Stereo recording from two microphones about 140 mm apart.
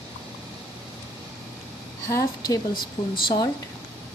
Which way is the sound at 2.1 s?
25° left (ahead or behind).